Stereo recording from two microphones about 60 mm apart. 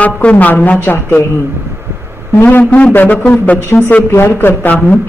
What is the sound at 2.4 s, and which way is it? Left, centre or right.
Speech, left.